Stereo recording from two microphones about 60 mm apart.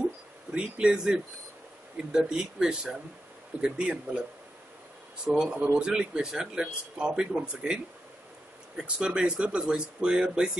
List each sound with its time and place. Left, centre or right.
0.6 s speech: centre
5.2 s speech: centre